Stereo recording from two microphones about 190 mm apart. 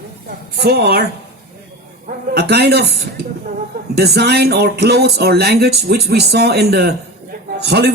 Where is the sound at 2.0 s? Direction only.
55° right (ahead or behind).